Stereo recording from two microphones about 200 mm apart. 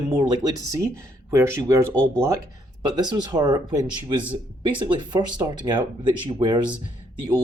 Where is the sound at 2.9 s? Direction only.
20° right (ahead or behind).